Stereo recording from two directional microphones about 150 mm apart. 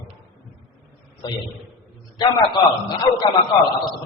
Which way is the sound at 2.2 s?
30° left (ahead or behind).